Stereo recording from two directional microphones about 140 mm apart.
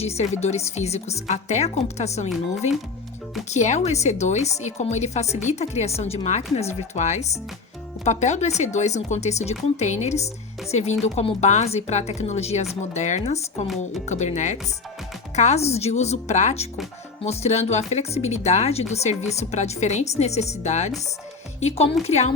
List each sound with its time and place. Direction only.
0.0 s speech: 50° left (ahead or behind)
3.5 s speech: 55° left (ahead or behind)